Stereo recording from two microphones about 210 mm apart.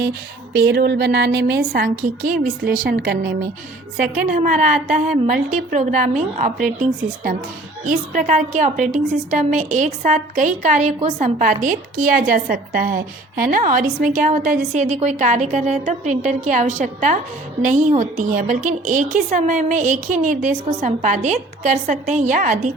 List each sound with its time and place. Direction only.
0.5 s a woman's voice: 50° right (ahead or behind)
7.9 s a woman's voice: 40° right (ahead or behind)